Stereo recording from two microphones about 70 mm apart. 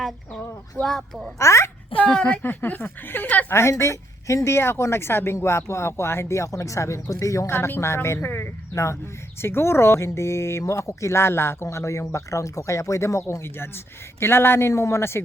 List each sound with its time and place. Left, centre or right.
0.8 s speech: centre
1.4 s speech: left
2.1 s a woman's voice: centre
2.4 s speech: left
3.5 s speech: left